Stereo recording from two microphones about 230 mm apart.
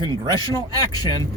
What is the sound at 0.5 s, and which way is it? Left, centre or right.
Speech, centre.